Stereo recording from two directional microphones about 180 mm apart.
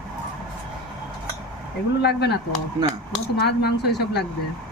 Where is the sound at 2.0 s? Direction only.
65° left (ahead or behind).